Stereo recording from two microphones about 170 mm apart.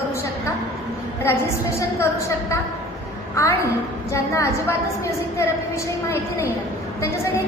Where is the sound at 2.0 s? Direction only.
15° left (ahead or behind).